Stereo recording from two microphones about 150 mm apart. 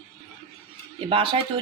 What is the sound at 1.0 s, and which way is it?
Speech, 35° right (ahead or behind).